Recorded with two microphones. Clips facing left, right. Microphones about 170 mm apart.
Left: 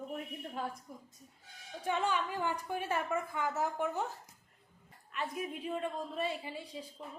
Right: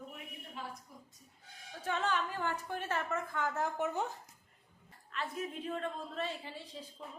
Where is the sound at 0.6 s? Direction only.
45° left (ahead or behind).